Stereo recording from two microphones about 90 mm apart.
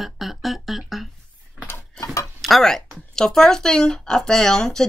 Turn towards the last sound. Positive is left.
turn(degrees=5)  # may be behind; listen again after turning